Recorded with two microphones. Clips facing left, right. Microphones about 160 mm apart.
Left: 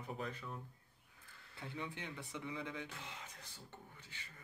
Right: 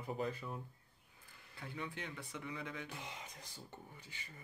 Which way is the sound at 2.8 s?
15° right (ahead or behind).